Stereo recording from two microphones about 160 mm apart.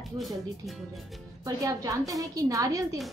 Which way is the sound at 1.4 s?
20° right (ahead or behind).